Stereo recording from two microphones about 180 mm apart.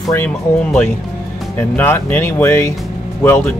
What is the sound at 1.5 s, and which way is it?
Speech, 10° left (ahead or behind).